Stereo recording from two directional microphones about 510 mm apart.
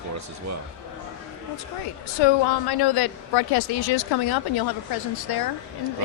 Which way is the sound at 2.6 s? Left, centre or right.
Left.